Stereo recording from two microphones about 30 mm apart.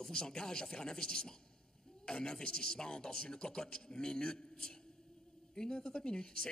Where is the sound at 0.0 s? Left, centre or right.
Left.